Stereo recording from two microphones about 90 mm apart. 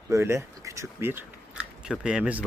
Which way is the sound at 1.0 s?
25° right (ahead or behind).